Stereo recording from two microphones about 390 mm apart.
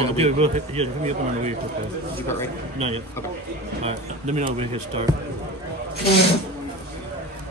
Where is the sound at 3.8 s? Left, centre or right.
Centre.